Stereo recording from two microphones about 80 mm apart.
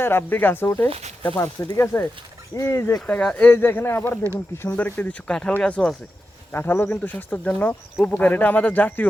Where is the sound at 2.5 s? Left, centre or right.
Left.